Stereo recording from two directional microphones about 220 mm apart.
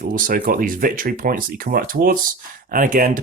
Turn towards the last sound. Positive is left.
turn(degrees=-40)  # may be behind; listen again after turning